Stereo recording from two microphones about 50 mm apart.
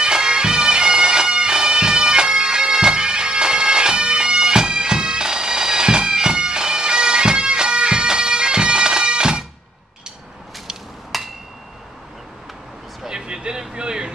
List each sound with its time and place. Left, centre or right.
0.0 s bagpipes: centre
11.1 s hammer: centre
13.0 s a sound: centre